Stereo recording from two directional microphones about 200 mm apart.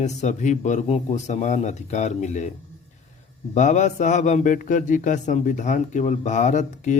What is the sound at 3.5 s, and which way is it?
A man's voice, 35° left (ahead or behind).